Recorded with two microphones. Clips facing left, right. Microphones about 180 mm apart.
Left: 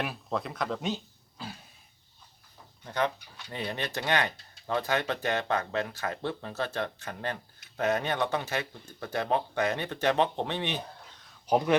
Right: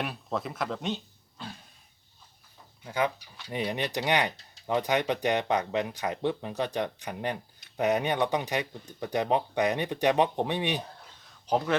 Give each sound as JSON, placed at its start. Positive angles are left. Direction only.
{"t": 0.0, "sound": "speech", "side_deg": 0}
{"t": 2.8, "sound": "speech", "side_deg": -10}
{"t": 11.4, "sound": "speech", "side_deg": 15}